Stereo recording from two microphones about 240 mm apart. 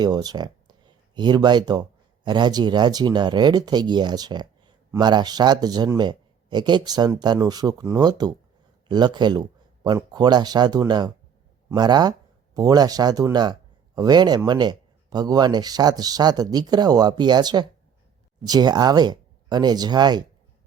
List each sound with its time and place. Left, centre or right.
0.0 s speech: centre